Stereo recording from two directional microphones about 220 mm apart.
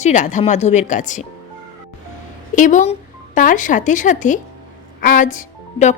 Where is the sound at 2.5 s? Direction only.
35° left (ahead or behind).